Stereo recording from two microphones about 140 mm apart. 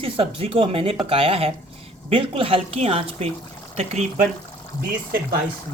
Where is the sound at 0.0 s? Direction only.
40° right (ahead or behind).